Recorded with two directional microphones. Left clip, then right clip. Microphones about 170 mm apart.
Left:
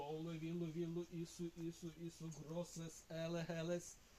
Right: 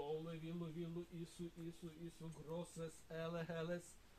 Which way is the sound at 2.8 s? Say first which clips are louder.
Even; 20° left (ahead or behind).